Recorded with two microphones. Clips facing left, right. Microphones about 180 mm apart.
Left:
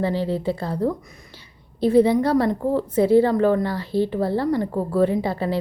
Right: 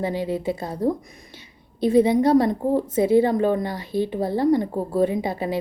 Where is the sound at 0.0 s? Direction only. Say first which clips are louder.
Left 2 dB; 15° right (ahead or behind).